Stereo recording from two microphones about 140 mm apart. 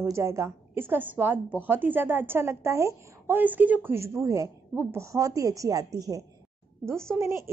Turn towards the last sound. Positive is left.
turn(degrees=-20)  # may be behind; listen again after turning